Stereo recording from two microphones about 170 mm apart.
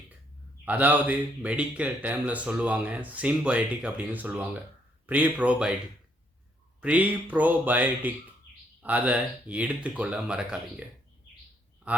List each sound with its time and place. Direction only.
0.6 s speech: 10° right (ahead or behind)
6.8 s speech: 10° right (ahead or behind)
11.9 s speech: 5° right (ahead or behind)